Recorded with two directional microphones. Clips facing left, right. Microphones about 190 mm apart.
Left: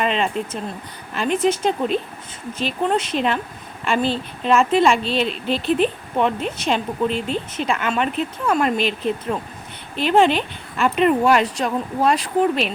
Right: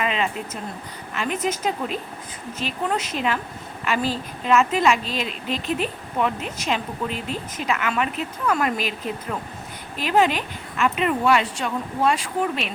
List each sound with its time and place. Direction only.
0.0 s a woman's voice: 30° left (ahead or behind)
9.9 s a woman's voice: 30° left (ahead or behind)